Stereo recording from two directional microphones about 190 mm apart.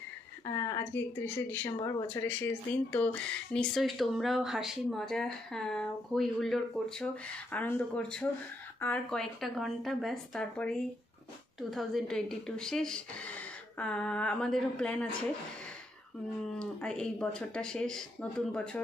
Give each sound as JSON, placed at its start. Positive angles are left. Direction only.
{"t": 0.5, "sound": "speech", "side_deg": 15}
{"t": 1.8, "sound": "speech", "side_deg": 20}
{"t": 2.0, "sound": "speech", "side_deg": 10}
{"t": 16.5, "sound": "speech", "side_deg": 5}